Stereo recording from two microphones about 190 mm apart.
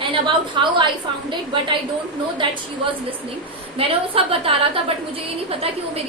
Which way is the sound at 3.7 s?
30° right (ahead or behind).